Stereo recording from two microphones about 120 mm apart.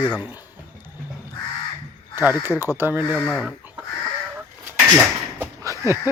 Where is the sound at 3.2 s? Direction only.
5° left (ahead or behind).